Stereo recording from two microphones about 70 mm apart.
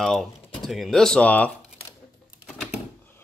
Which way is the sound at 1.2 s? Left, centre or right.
Left.